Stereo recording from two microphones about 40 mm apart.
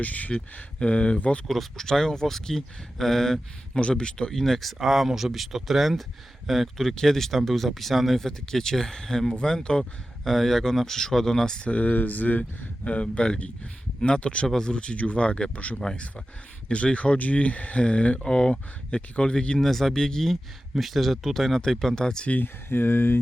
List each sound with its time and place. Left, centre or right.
0.0 s speech: left
1.5 s speech: centre
3.8 s speech: left
4.4 s speech: centre
4.8 s speech: centre
8.3 s speech: centre
10.2 s speech: centre
11.6 s speech: left
14.4 s speech: centre
14.7 s speech: left
18.3 s speech: left
19.5 s speech: centre
22.7 s speech: left